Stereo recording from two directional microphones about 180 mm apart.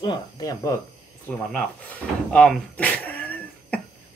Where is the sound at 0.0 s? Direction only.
20° left (ahead or behind).